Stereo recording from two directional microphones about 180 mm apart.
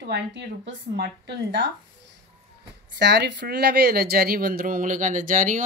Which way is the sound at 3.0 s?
70° right (ahead or behind).